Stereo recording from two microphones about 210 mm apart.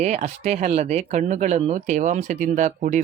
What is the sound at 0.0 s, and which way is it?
Speech, 30° right (ahead or behind).